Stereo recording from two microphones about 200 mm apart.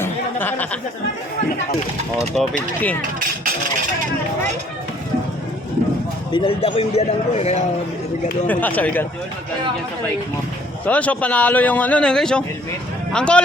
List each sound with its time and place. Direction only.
0.0 s a sound: 10° left (ahead or behind)
2.3 s speech: centre (ahead or behind)
6.3 s a man's voice: 25° left (ahead or behind)
8.4 s speech: 10° left (ahead or behind)
10.8 s speech: 5° left (ahead or behind)